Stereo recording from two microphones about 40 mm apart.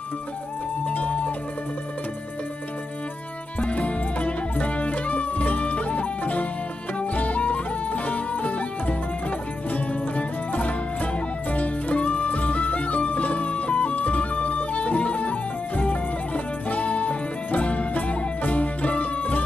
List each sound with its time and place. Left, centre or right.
0.8 s music: left
3.7 s music: left